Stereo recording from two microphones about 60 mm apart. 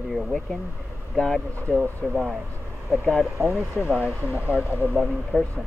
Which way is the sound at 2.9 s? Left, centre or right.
Centre.